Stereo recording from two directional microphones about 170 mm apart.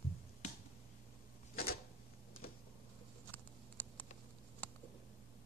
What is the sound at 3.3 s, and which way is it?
Patter, 10° left (ahead or behind).